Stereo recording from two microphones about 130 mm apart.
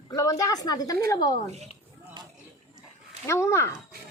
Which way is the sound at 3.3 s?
20° left (ahead or behind).